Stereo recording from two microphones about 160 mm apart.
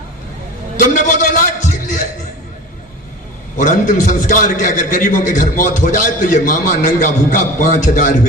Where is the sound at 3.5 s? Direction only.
55° left (ahead or behind).